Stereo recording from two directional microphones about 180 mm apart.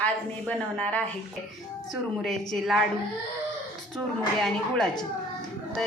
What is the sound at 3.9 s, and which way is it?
A woman's voice, centre (ahead or behind).